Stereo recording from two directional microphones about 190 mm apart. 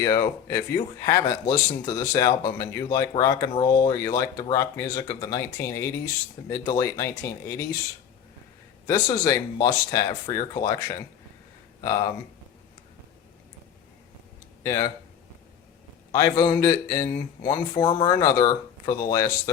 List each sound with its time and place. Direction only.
0.0 s speech: 15° left (ahead or behind)
8.9 s speech: 20° left (ahead or behind)
14.6 s speech: 15° left (ahead or behind)
16.1 s speech: 20° left (ahead or behind)